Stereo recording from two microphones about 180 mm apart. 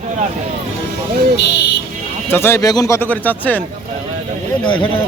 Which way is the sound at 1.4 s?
70° left (ahead or behind).